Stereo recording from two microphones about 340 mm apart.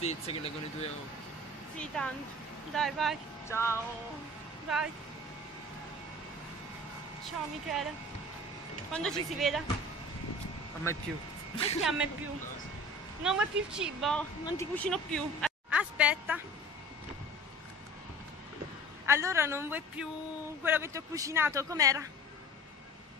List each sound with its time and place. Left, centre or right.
0.0 s speech: centre
1.8 s speech: centre
7.2 s speech: centre
8.9 s speech: centre
11.5 s a woman's voice: centre
11.8 s speech: centre
13.2 s speech: centre
19.0 s speech: centre